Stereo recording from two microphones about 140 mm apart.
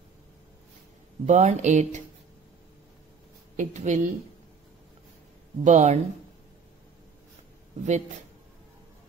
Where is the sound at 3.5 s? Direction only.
60° right (ahead or behind).